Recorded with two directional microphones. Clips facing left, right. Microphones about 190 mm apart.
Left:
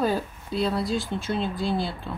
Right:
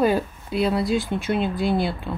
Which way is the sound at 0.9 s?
60° right (ahead or behind).